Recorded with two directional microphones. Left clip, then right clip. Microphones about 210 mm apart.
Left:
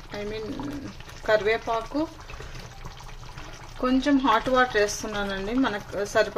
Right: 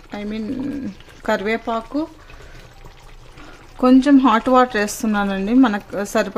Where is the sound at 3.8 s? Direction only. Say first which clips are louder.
Right 9 dB; 55° right (ahead or behind).